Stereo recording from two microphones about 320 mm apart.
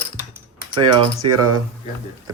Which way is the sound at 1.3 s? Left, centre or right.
Right.